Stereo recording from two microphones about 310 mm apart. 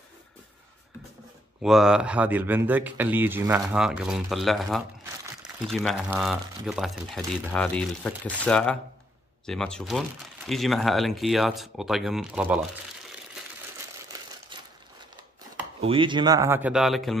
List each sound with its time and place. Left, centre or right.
1.6 s speech: centre
14.5 s a sound: centre
15.8 s speech: centre